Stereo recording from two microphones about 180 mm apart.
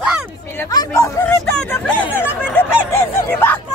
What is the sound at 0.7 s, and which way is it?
Chatter, 15° left (ahead or behind).